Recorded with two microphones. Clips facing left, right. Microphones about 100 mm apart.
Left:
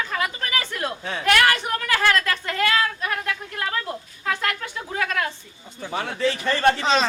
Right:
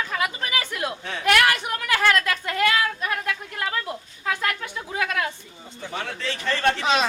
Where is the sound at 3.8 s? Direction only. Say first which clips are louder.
Left 1 dB; 10° right (ahead or behind).